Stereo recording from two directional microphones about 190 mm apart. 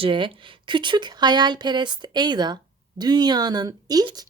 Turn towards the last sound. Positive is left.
turn(degrees=-20)  # may be behind; listen again after turning